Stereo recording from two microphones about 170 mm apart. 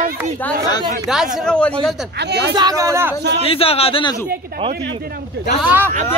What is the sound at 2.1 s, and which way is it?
Speech, 80° right.